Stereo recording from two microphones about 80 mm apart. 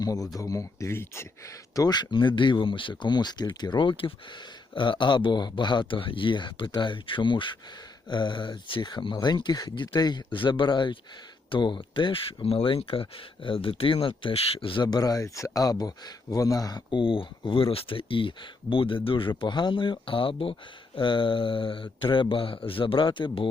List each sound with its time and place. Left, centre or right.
0.0 s speech: left
1.7 s speech: left
3.6 s speech: left
9.2 s speech: left
9.9 s speech: left
14.9 s speech: left
16.9 s speech: left